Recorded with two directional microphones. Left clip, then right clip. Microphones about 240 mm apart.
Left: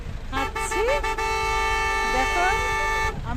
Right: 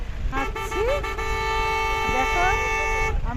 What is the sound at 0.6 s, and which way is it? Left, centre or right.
Speech, left.